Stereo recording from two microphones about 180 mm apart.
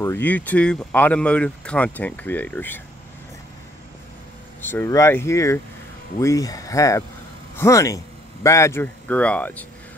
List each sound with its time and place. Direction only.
0.0 s speech: 10° left (ahead or behind)
4.6 s speech: 10° left (ahead or behind)